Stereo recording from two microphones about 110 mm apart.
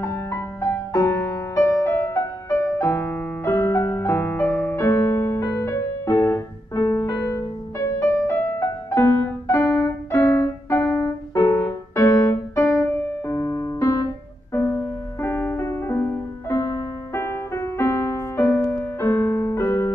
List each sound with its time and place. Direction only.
0.0 s music: 25° left (ahead or behind)